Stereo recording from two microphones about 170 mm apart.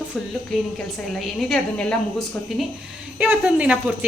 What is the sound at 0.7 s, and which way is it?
A woman's voice, centre (ahead or behind).